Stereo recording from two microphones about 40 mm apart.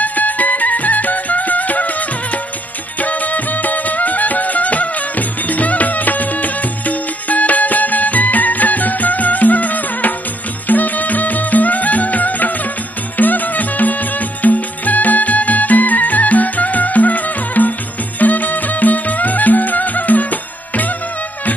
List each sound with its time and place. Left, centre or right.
0.0 s music: left